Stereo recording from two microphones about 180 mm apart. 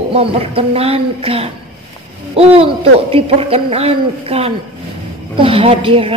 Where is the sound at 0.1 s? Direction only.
30° right (ahead or behind).